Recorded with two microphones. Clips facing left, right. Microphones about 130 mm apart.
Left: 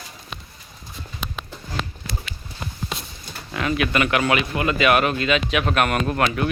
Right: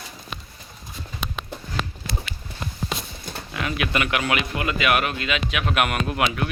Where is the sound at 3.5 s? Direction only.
10° right (ahead or behind).